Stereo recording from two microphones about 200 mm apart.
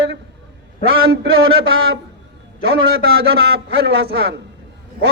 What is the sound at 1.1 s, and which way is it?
Speech, 65° right (ahead or behind).